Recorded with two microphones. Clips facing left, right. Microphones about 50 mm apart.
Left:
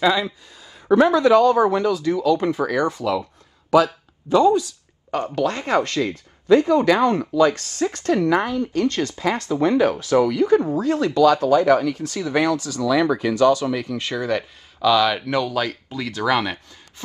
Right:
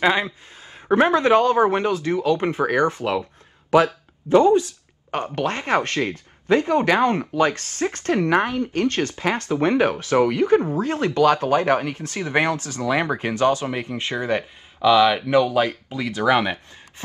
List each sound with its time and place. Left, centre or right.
0.0 s speech: right